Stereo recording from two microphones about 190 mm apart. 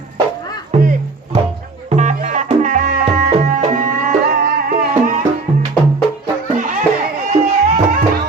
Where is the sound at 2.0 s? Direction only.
40° right (ahead or behind).